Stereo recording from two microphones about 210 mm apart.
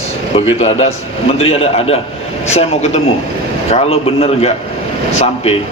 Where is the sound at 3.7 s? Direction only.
30° left (ahead or behind).